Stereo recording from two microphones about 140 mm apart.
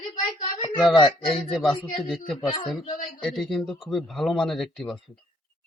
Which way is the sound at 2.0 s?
Centre (ahead or behind).